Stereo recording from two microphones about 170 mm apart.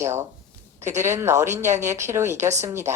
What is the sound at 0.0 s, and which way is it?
A woman's voice, 15° right (ahead or behind).